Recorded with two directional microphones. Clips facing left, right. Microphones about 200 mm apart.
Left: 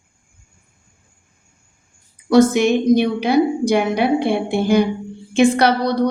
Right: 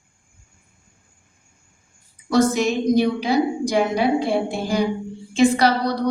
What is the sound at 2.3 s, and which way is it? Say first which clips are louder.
A woman's voice: left 5 dB; 65° left (ahead or behind).